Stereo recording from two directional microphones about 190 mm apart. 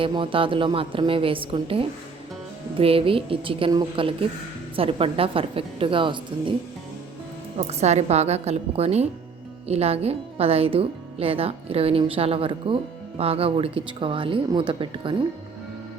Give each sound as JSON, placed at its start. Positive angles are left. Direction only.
{"t": 0.0, "sound": "speech", "side_deg": -25}
{"t": 7.7, "sound": "speech", "side_deg": -35}